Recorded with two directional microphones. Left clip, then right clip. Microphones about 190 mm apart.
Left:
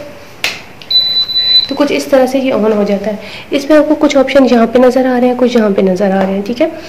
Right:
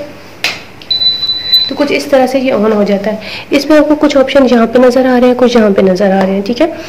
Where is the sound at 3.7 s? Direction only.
Centre (ahead or behind).